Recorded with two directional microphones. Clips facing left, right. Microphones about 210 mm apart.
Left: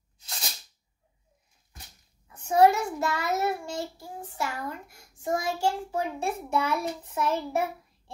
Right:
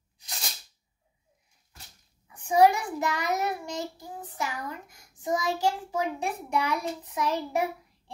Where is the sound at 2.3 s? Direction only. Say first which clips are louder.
Even; 15° right (ahead or behind).